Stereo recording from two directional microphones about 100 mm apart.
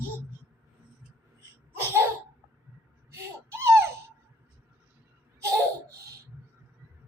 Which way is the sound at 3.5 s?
25° right (ahead or behind).